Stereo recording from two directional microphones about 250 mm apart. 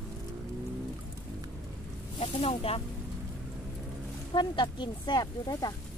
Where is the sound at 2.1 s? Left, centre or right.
Left.